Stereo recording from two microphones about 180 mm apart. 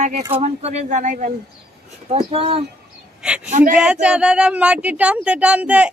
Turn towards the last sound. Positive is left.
turn(degrees=-5)  # may be behind; listen again after turning